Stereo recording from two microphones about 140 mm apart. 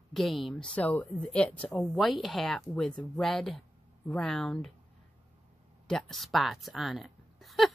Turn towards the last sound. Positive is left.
turn(degrees=0)  # may be behind; listen again after turning